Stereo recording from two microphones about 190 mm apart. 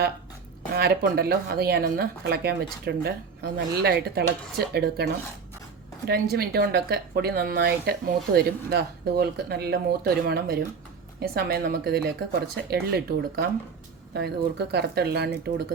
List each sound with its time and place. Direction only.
0.7 s a woman's voice: 60° right (ahead or behind)
6.1 s a woman's voice: 55° right (ahead or behind)